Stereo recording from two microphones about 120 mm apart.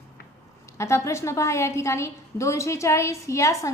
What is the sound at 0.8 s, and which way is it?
A woman's voice, 25° left (ahead or behind).